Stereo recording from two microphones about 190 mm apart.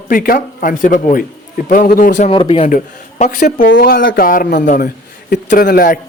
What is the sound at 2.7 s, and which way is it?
A man's voice, 45° left (ahead or behind).